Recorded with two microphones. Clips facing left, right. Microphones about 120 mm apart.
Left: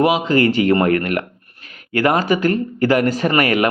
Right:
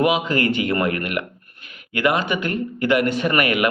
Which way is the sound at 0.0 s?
30° left (ahead or behind).